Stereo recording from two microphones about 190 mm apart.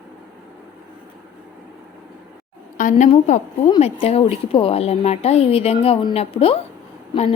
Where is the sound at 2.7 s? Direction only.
40° left (ahead or behind).